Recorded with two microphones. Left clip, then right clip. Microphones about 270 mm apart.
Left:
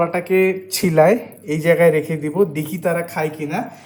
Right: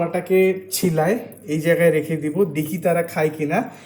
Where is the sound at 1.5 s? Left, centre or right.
Left.